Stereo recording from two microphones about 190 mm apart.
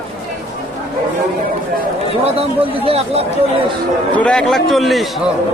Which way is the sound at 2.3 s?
30° right (ahead or behind).